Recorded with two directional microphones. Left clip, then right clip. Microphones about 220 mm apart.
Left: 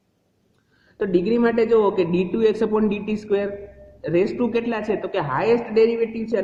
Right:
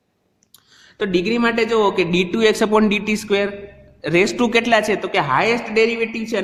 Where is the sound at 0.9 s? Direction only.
25° right (ahead or behind).